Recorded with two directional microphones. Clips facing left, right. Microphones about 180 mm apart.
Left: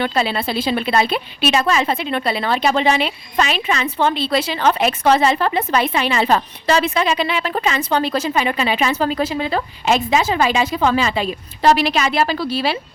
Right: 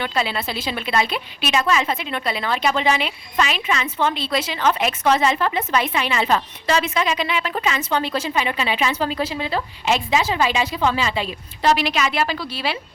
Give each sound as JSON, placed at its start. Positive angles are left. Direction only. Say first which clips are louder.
{"t": 0.0, "sound": "a woman's voice", "louder": "left 4 dB", "side_deg": 35}